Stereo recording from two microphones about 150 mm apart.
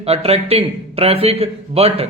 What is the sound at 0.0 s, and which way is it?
A man's voice, 40° right (ahead or behind).